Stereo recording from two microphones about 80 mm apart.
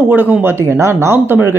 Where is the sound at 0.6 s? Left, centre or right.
Right.